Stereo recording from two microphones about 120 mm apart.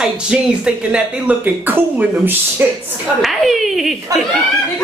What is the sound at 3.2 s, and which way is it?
Speech, centre (ahead or behind).